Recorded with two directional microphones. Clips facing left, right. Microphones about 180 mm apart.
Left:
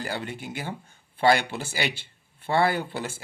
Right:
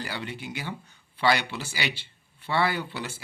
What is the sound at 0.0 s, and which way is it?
Speech, 45° left (ahead or behind).